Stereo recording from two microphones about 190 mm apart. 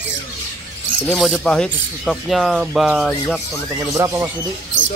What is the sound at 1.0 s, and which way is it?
Speech, centre (ahead or behind).